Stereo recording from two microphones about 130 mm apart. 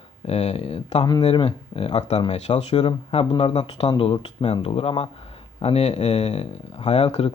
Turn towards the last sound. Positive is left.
turn(degrees=55)  # may be behind; listen again after turning